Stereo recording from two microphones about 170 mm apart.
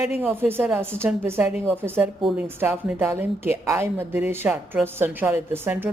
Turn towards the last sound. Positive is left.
turn(degrees=-10)  # may be behind; listen again after turning